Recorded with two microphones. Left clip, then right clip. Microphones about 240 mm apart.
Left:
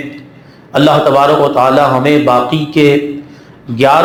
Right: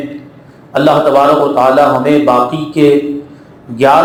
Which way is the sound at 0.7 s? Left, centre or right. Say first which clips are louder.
Even; left.